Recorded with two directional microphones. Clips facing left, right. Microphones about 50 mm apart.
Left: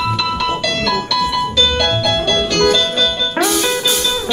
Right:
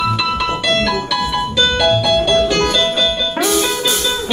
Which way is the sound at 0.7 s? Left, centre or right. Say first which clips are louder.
Right 1 dB; centre.